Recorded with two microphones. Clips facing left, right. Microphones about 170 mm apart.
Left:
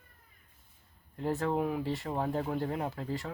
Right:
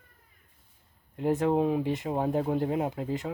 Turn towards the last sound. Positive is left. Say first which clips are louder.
# right 5 dB
turn(degrees=-15)  # may be behind; listen again after turning